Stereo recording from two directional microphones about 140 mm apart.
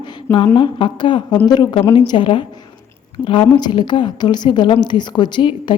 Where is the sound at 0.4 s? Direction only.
30° left (ahead or behind).